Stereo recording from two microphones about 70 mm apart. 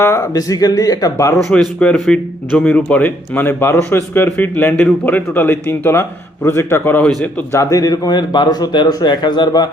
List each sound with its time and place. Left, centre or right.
0.0 s speech: left
0.3 s speech: left
1.1 s speech: left
1.4 s a man's voice: centre; by 7.0 s left
7.5 s a man's voice: left